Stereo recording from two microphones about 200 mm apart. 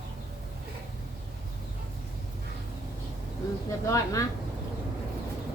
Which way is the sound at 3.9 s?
15° left (ahead or behind).